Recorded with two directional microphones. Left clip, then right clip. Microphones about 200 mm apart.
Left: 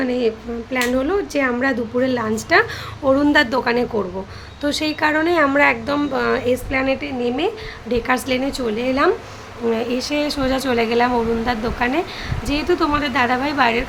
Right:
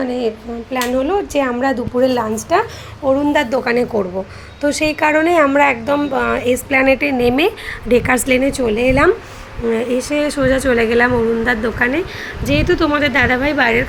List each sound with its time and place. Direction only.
0.0 s a woman's voice: centre (ahead or behind)
6.7 s a woman's voice: 30° right (ahead or behind)
9.6 s a woman's voice: 5° right (ahead or behind)